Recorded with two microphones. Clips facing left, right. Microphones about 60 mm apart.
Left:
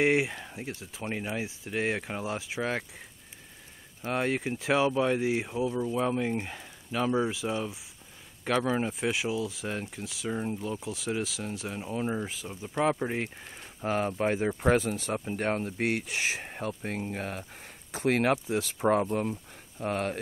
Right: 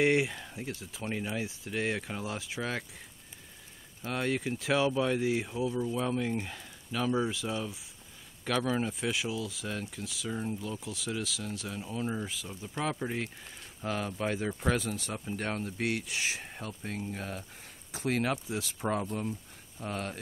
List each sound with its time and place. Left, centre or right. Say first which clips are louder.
0.0 s speech: left 1 dB; centre
4.0 s speech: left 3 dB; centre; by 20.2 s left